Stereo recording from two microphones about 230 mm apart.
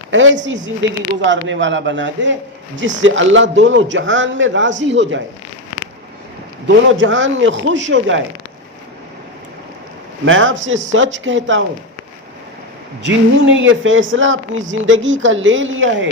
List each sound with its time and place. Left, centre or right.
0.1 s a man's voice: right
6.7 s a man's voice: right
10.2 s speech: right
13.0 s speech: right